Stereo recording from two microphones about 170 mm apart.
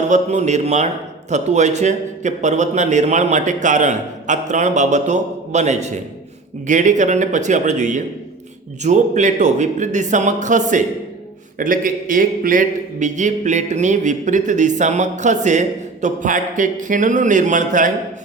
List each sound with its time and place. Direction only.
0.1 s a man's voice: 45° right (ahead or behind)